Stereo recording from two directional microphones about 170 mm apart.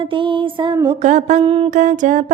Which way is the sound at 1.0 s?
45° right (ahead or behind).